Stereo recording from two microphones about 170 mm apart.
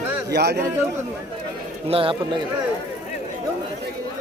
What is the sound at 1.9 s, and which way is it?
Speech, 30° right (ahead or behind).